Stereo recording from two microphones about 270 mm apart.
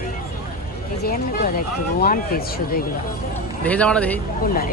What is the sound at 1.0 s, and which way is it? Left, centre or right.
Speech, left.